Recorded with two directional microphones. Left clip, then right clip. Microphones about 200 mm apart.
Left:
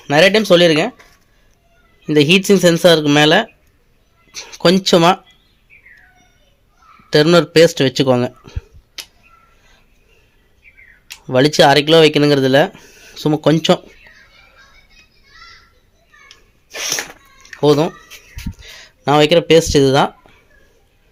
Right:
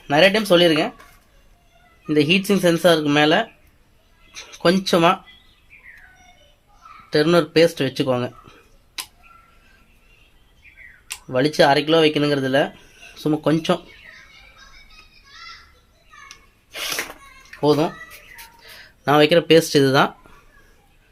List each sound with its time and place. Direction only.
0.0 s speech: 50° left (ahead or behind)
2.0 s speech: 45° left (ahead or behind)
7.1 s speech: 40° left (ahead or behind)
11.3 s speech: 45° left (ahead or behind)
16.6 s sneeze: 40° left (ahead or behind)
17.6 s speech: 45° left (ahead or behind)
18.6 s speech: 30° left (ahead or behind)